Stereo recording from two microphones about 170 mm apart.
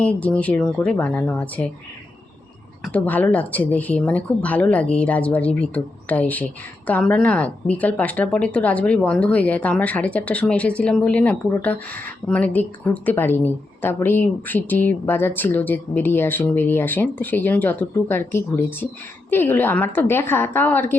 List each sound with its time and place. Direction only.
0.0 s speech: 10° left (ahead or behind)
2.8 s speech: 10° left (ahead or behind)